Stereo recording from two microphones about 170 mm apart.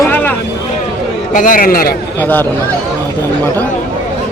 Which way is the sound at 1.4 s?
55° left (ahead or behind).